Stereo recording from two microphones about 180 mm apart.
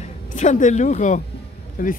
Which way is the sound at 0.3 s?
45° left (ahead or behind).